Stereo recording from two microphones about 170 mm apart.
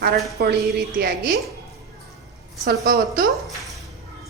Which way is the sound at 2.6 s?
65° right (ahead or behind).